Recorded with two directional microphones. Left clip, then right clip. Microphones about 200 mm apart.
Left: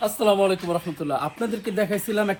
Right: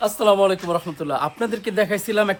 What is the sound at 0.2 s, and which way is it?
Speech, 20° right (ahead or behind).